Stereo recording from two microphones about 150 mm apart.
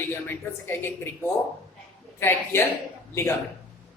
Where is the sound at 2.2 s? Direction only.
15° left (ahead or behind).